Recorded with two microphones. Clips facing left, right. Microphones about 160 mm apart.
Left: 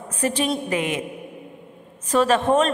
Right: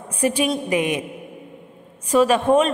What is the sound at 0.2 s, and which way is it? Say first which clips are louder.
Speech: right 2 dB; 10° right (ahead or behind).